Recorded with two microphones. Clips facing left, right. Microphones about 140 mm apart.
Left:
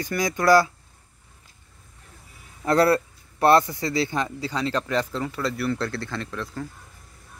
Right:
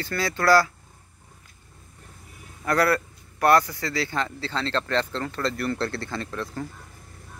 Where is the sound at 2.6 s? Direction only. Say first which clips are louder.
Left 3 dB; 25° left (ahead or behind); by 6.6 s centre (ahead or behind).